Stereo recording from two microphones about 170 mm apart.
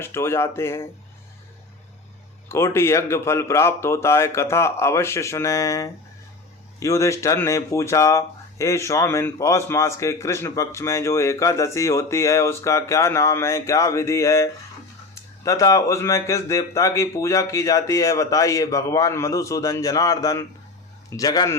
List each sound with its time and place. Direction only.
0.0 s speech: 15° left (ahead or behind)
2.5 s speech: 15° left (ahead or behind)